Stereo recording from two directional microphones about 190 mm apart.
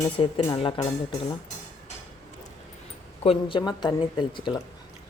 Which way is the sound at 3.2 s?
30° left (ahead or behind).